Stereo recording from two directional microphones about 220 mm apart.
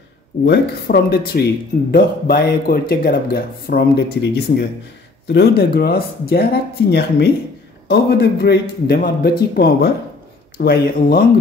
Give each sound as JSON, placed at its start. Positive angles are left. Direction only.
{"t": 0.5, "sound": "speech", "side_deg": 45}